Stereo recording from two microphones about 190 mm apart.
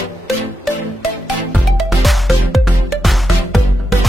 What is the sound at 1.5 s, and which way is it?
Music, centre (ahead or behind).